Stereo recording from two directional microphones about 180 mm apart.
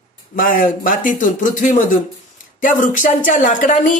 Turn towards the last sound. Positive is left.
turn(degrees=45)  # may be behind; listen again after turning